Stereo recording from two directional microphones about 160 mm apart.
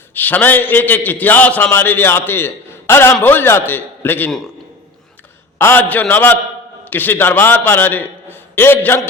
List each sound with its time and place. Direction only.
0.1 s a man's voice: 10° left (ahead or behind)
5.5 s a man's voice: 10° left (ahead or behind)